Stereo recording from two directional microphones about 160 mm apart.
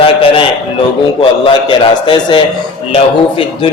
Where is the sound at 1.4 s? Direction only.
30° left (ahead or behind).